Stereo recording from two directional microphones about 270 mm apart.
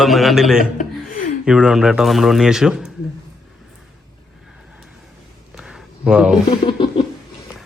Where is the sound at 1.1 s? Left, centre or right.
Left.